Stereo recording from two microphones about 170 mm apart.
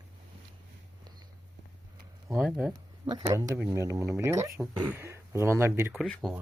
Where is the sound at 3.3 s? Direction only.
20° right (ahead or behind).